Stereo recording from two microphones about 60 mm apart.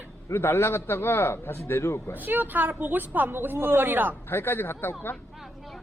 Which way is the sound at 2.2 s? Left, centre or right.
Right.